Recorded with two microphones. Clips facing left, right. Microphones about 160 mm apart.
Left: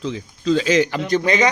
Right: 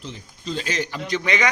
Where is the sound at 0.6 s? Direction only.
90° left.